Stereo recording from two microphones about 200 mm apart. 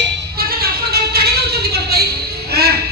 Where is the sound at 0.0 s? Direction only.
50° right (ahead or behind).